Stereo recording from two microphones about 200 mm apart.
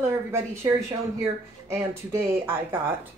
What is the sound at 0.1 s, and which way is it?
Speech, 15° right (ahead or behind).